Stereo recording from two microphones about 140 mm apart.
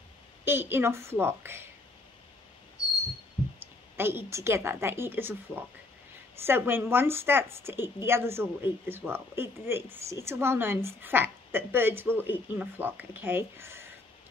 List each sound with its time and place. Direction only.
0.5 s a woman's voice: 15° right (ahead or behind)
3.5 s a woman's voice: 15° right (ahead or behind)